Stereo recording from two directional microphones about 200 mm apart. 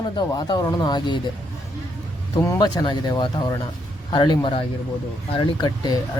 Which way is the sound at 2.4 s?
15° left (ahead or behind).